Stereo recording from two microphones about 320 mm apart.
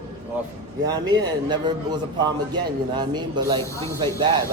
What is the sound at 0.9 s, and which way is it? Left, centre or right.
A man's voice, centre.